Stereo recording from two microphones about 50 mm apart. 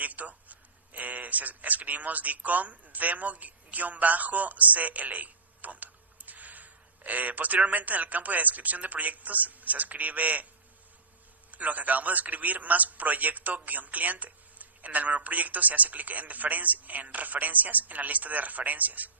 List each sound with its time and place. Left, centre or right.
0.0 s a man's voice: right
11.5 s a man's voice: right